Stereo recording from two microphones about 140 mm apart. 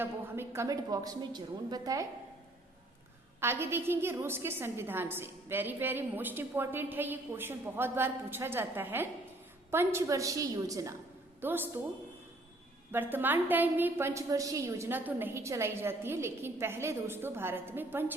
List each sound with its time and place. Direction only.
0.0 s a woman's voice: 20° right (ahead or behind)
3.4 s a woman's voice: 15° right (ahead or behind)
12.9 s a woman's voice: 15° right (ahead or behind)